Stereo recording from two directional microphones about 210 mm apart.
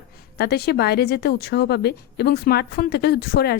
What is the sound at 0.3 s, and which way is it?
A woman's voice, 50° left (ahead or behind).